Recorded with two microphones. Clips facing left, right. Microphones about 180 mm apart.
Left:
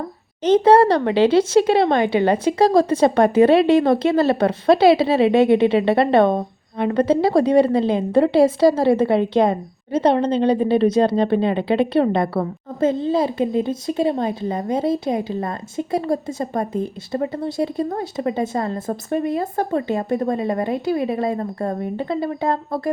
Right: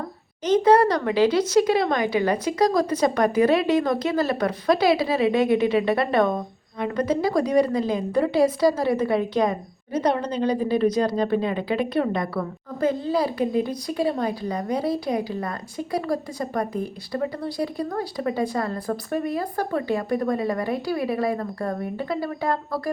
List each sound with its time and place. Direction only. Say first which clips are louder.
0.4 s speech: left 4 dB; 30° left (ahead or behind)